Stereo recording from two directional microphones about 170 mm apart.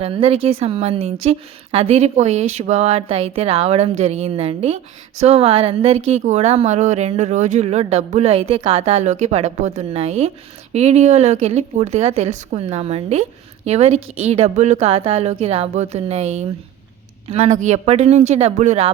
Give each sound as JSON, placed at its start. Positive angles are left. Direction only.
{"t": 0.0, "sound": "a woman's voice", "side_deg": -35}